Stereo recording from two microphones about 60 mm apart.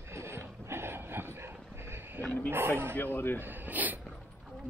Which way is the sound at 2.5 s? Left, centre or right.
Right.